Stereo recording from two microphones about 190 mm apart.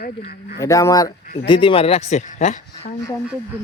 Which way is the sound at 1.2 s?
45° left (ahead or behind).